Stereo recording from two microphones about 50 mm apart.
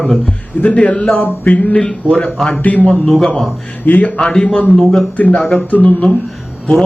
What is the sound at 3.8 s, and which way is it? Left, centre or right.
Speech, left.